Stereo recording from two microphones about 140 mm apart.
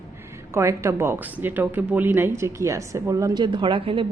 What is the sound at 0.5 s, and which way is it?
Speech, 20° right (ahead or behind).